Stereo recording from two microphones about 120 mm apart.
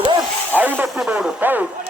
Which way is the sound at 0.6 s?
15° right (ahead or behind).